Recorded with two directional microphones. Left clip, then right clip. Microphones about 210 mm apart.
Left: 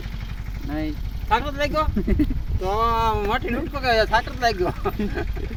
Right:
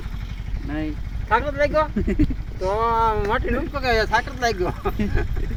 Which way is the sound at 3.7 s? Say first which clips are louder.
Left 1 dB; 15° left (ahead or behind).